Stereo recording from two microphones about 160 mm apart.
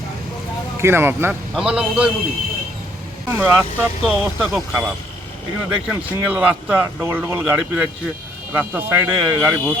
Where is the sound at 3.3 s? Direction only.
10° right (ahead or behind).